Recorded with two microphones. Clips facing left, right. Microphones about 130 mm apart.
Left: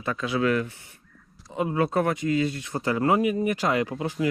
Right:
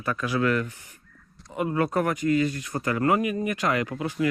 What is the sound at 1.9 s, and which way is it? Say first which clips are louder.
Speech: even; 25° left (ahead or behind).